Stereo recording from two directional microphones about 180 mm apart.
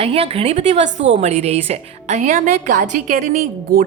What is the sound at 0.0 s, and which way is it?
A woman's voice, 30° right (ahead or behind).